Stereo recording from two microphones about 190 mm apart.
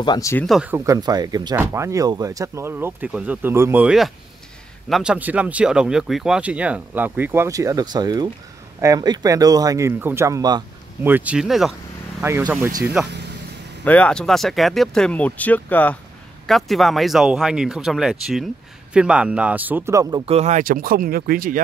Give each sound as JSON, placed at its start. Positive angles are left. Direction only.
{"t": 0.0, "sound": "speech", "side_deg": 20}
{"t": 0.5, "sound": "speech", "side_deg": -5}
{"t": 0.7, "sound": "speech", "side_deg": -20}
{"t": 12.2, "sound": "speech", "side_deg": -10}
{"t": 13.8, "sound": "speech", "side_deg": 5}